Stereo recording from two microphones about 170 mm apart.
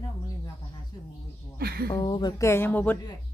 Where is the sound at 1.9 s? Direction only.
25° left (ahead or behind).